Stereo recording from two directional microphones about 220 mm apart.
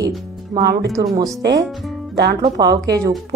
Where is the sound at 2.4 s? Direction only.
20° right (ahead or behind).